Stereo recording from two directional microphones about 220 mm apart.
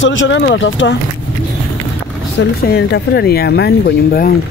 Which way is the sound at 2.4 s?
45° left (ahead or behind).